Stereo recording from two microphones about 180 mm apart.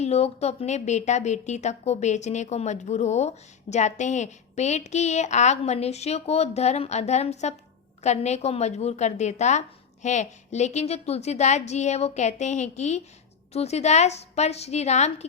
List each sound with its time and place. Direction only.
0.0 s a woman's voice: 35° left (ahead or behind)